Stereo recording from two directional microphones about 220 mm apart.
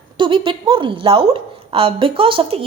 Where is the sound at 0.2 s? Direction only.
25° right (ahead or behind).